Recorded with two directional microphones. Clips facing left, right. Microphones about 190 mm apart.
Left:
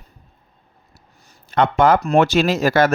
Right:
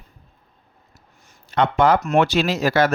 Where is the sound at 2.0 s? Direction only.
35° left (ahead or behind).